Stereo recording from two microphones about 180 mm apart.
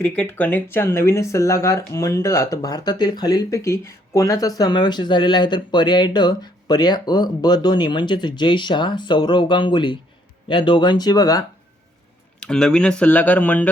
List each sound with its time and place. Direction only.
0.0 s speech: 10° left (ahead or behind)
12.4 s speech: 5° left (ahead or behind)